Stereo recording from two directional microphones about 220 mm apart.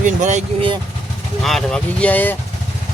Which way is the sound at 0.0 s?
35° right (ahead or behind).